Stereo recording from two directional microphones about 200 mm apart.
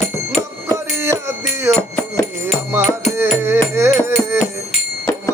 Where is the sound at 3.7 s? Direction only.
15° right (ahead or behind).